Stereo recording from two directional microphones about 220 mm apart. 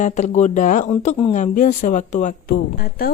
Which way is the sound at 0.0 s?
35° left (ahead or behind).